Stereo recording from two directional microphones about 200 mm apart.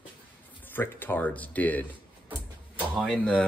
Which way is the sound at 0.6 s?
10° left (ahead or behind).